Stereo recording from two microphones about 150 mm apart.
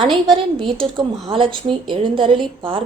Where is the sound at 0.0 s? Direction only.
35° right (ahead or behind).